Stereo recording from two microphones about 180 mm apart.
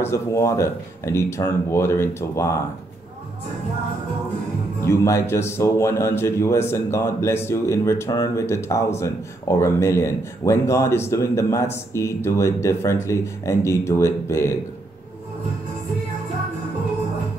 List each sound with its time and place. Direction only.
0.0 s a man's voice: 15° left (ahead or behind)
4.8 s a man's voice: 15° left (ahead or behind)